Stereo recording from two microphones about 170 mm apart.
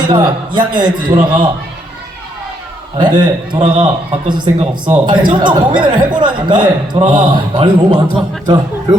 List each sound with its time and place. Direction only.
0.1 s a man's voice: 25° right (ahead or behind)
3.0 s a man's voice: 25° right (ahead or behind)